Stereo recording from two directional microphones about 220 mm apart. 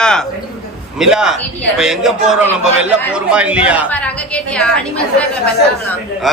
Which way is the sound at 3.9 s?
5° left (ahead or behind).